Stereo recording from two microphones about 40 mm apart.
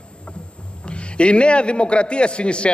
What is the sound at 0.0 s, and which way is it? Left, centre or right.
Rowboat, left.